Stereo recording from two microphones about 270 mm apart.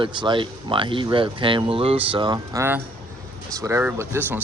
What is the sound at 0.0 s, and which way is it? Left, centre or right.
Speech, centre.